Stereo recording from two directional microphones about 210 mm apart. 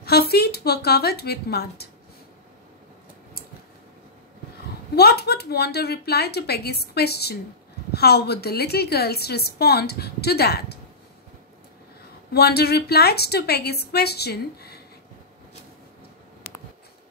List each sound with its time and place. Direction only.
0.0 s a woman's voice: 50° left (ahead or behind)
4.9 s a woman's voice: 50° left (ahead or behind)
12.3 s a woman's voice: 50° left (ahead or behind)